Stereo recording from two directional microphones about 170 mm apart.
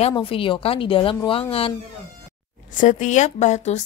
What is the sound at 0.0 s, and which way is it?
A woman's voice, 30° left (ahead or behind).